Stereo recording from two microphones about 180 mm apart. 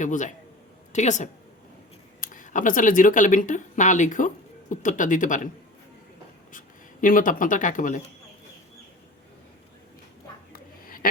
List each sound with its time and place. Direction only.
0.0 s speech: 45° left (ahead or behind)
7.0 s speech: 50° left (ahead or behind)
10.5 s a sound: 50° left (ahead or behind)